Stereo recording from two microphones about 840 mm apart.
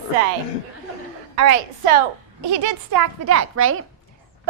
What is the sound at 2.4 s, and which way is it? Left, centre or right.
A woman's voice, right.